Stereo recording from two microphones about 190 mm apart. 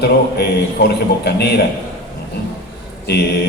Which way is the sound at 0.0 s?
55° left (ahead or behind).